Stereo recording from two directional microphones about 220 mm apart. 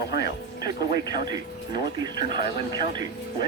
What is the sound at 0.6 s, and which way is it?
Speech, 20° right (ahead or behind).